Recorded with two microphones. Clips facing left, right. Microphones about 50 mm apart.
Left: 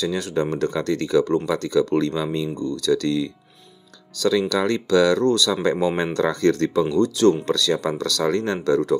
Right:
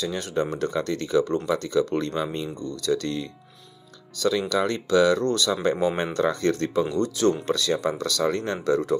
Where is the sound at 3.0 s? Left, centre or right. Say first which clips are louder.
Left 7 dB; left.